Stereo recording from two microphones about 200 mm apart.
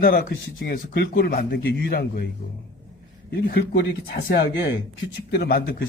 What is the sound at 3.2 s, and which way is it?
Speech, 55° left (ahead or behind).